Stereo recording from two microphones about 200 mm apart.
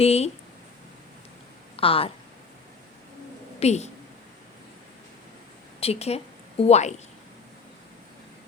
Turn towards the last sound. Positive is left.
turn(degrees=35)  # may be behind; listen again after turning